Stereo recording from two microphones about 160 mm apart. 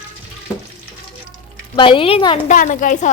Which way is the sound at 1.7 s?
35° left (ahead or behind).